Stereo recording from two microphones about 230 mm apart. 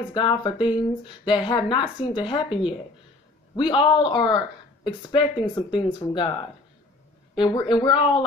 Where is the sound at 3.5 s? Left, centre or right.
Centre.